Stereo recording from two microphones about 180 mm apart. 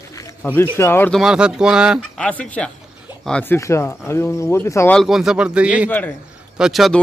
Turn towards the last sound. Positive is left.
turn(degrees=0)  # may be behind; listen again after turning